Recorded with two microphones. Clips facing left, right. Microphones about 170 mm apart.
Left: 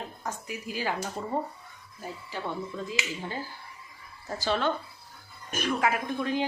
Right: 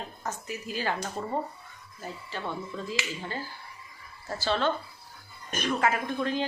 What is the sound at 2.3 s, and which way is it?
Speech, 15° left (ahead or behind).